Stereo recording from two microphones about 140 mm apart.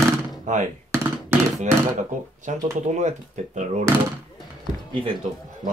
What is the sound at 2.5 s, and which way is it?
Speech, 55° right (ahead or behind).